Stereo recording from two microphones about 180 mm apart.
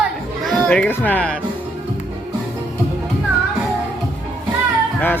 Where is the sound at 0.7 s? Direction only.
10° left (ahead or behind).